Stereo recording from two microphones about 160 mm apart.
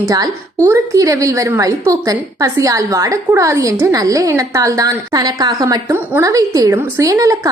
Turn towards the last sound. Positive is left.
turn(degrees=-20)  # may be behind; listen again after turning